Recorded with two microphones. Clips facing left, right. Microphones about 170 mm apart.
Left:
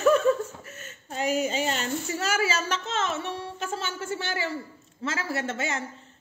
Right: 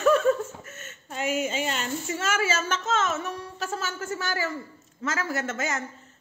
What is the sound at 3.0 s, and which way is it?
Music, 30° left (ahead or behind).